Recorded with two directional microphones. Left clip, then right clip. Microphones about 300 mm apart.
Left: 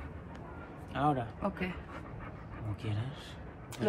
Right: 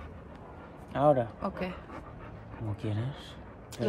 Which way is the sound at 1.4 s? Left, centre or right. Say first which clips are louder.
Right 1 dB; centre.